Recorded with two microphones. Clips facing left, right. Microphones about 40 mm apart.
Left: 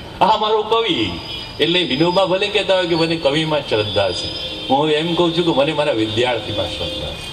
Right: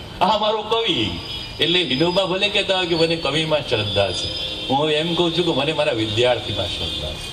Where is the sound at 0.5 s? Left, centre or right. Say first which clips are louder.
Left 5 dB; left.